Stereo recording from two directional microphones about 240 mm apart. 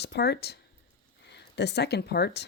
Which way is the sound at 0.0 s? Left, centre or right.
Left.